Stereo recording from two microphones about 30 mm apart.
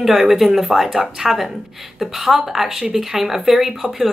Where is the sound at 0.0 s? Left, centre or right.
Centre.